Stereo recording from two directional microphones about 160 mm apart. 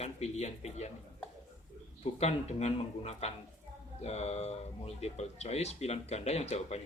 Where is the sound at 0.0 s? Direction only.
40° left (ahead or behind).